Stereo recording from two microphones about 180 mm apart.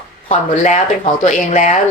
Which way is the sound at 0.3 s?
40° left (ahead or behind).